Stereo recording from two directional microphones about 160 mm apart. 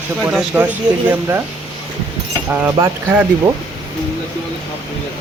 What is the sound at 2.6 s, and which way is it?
Speech, 10° right (ahead or behind).